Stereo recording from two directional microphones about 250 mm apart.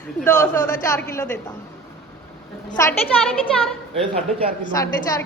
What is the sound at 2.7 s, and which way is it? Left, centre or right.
Speech, centre.